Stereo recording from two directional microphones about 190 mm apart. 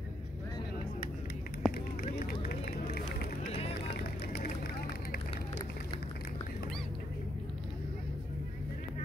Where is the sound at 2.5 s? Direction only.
55° left (ahead or behind).